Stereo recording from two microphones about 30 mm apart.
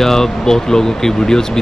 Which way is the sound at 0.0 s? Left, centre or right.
Centre.